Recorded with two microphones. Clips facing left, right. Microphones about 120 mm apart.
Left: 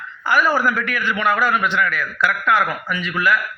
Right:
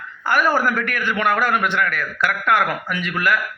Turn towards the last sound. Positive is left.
turn(degrees=-55)  # may be behind; listen again after turning